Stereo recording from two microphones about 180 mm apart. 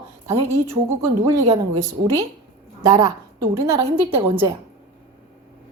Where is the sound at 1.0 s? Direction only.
20° right (ahead or behind).